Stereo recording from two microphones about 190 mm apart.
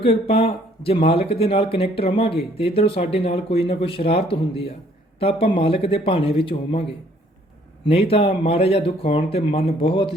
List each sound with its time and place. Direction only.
0.0 s speech: 30° left (ahead or behind)
7.9 s speech: 30° left (ahead or behind)